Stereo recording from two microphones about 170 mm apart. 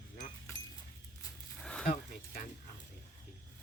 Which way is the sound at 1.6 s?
5° left (ahead or behind).